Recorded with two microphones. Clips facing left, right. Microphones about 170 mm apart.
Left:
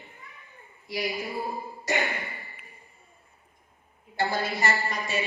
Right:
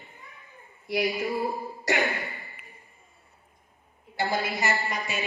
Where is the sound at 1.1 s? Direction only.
Centre (ahead or behind).